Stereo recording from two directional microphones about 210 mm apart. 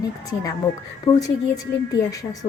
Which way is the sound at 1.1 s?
15° left (ahead or behind).